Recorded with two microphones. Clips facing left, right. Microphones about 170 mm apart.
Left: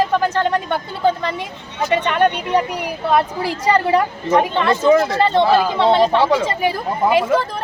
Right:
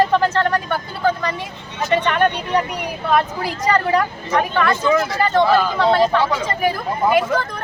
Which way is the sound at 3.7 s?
30° left (ahead or behind).